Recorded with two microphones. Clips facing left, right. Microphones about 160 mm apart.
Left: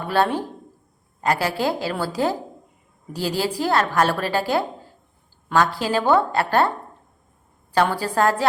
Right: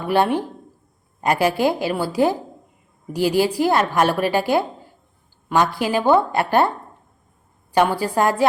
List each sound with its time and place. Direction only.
0.1 s a woman's voice: 15° right (ahead or behind)
7.7 s a woman's voice: 15° right (ahead or behind)